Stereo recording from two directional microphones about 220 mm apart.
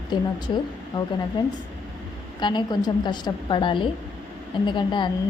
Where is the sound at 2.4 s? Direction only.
20° left (ahead or behind).